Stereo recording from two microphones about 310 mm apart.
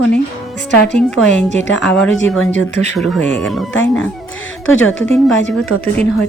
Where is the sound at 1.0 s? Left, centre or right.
Centre.